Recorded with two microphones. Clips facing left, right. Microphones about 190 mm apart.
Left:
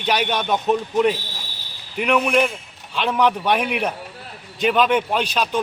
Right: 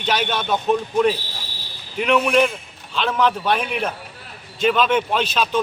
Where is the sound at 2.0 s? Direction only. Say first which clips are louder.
Right 1 dB; 5° left (ahead or behind).